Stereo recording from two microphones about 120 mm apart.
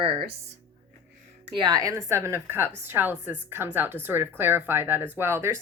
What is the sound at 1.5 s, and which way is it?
A woman's voice, 40° right (ahead or behind).